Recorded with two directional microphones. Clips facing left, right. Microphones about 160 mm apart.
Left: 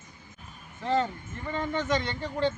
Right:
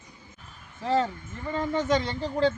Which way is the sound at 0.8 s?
5° right (ahead or behind).